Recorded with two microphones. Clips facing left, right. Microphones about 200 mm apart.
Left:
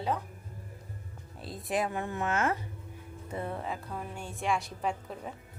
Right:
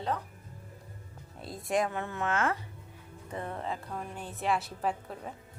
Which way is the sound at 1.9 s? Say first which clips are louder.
Left 1 dB; 15° left (ahead or behind).